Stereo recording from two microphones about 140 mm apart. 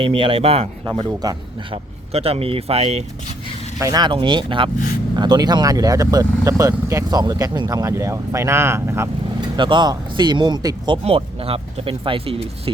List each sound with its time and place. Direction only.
0.0 s speech: 40° right (ahead or behind)
2.1 s speech: 45° right (ahead or behind)
3.8 s speech: 25° right (ahead or behind)
9.6 s speech: 35° right (ahead or behind)